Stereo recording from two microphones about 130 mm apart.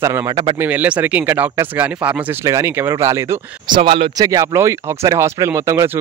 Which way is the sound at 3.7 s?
45° right (ahead or behind).